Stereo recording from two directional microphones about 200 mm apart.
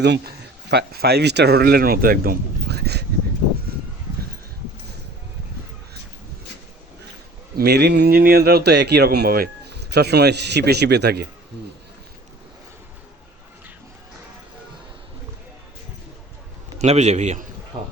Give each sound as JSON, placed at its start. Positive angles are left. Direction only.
{"t": 0.0, "sound": "speech", "side_deg": -55}
{"t": 7.5, "sound": "speech", "side_deg": -55}
{"t": 16.7, "sound": "a man's voice", "side_deg": -35}
{"t": 17.7, "sound": "speech", "side_deg": -25}